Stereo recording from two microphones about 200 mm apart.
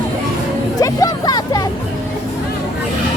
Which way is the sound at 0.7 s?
20° left (ahead or behind).